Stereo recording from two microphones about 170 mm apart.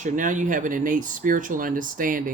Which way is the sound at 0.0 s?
50° right (ahead or behind).